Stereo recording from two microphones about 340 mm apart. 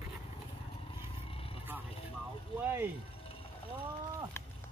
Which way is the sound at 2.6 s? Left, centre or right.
Centre.